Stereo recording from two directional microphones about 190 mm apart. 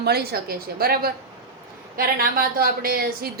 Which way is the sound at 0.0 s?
55° right (ahead or behind).